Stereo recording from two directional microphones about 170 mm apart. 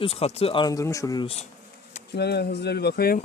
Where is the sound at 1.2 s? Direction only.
40° left (ahead or behind).